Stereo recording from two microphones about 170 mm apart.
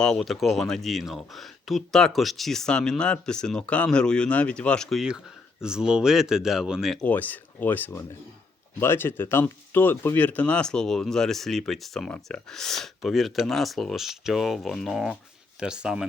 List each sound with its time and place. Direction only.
0.0 s speech: 5° left (ahead or behind)